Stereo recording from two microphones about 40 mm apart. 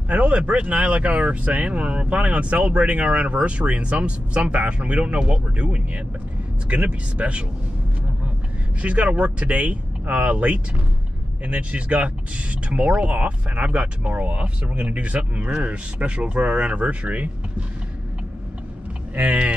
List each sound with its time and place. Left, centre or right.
0.1 s speech: right
8.8 s speech: right
19.1 s speech: right